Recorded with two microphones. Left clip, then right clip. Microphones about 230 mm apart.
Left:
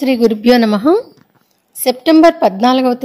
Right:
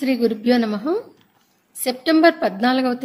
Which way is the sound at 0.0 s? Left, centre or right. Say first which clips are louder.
Left 8 dB; left.